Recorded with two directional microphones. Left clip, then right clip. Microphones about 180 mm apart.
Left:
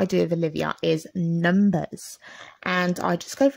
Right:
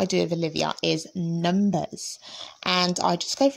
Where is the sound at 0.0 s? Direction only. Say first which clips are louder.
Left 2 dB; 30° left (ahead or behind).